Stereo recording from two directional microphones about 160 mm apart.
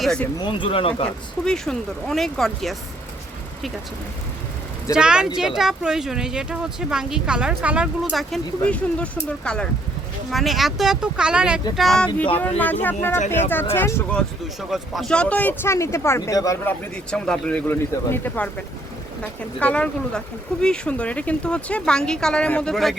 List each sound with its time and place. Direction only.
0.0 s speech: 5° left (ahead or behind)
0.4 s speech: 35° left (ahead or behind)
1.0 s speech: 5° left (ahead or behind)
4.9 s speech: 5° right (ahead or behind); by 14.2 s 15° left (ahead or behind)
14.7 s speech: centre (ahead or behind); by 16.7 s 20° left (ahead or behind)
17.1 s speech: 5° left (ahead or behind)
19.5 s speech: 10° left (ahead or behind)